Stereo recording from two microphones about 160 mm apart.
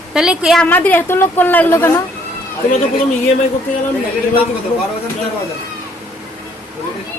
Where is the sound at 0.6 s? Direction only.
10° left (ahead or behind).